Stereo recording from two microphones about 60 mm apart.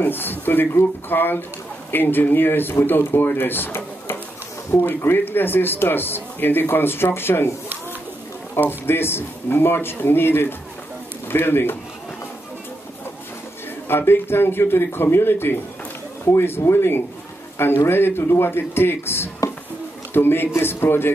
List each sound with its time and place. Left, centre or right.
0.0 s speech: left
8.5 s speech: left
13.8 s speech: left